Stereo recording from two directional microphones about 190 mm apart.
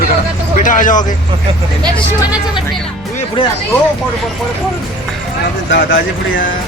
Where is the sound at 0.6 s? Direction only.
45° left (ahead or behind).